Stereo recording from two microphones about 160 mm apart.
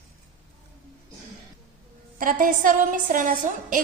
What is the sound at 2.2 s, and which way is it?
A woman's voice, 60° right (ahead or behind).